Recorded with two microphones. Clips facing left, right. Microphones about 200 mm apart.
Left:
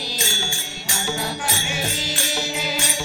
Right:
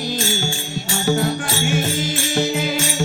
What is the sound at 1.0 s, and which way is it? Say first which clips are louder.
Music: right 7 dB; 50° right (ahead or behind).